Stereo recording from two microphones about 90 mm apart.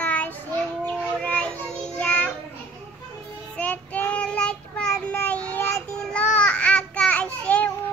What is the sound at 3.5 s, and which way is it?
Child singing, 15° left (ahead or behind).